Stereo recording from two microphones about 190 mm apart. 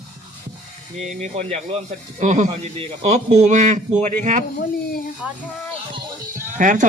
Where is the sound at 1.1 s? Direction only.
35° right (ahead or behind).